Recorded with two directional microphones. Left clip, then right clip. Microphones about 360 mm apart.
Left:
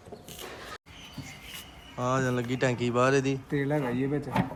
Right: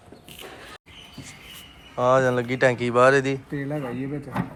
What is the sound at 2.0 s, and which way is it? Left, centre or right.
Speech, centre.